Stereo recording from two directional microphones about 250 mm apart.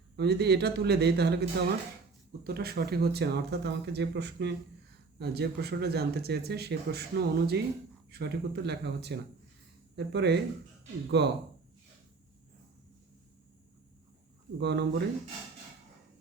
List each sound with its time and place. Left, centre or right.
0.2 s speech: right
14.6 s speech: right